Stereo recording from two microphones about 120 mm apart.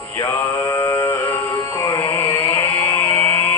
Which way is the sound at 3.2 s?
15° left (ahead or behind).